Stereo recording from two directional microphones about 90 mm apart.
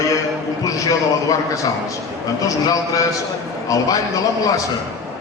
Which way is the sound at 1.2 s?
40° left (ahead or behind).